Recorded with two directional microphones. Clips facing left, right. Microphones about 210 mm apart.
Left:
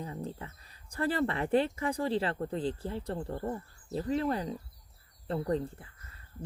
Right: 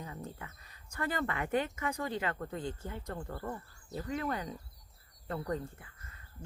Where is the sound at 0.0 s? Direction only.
30° left (ahead or behind).